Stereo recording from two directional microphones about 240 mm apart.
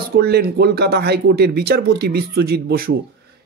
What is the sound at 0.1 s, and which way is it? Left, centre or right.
Speech, right.